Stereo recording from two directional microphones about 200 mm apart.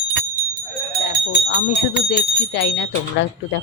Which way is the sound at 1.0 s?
55° left (ahead or behind).